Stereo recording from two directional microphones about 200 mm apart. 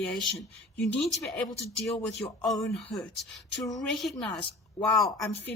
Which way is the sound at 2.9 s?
Centre (ahead or behind).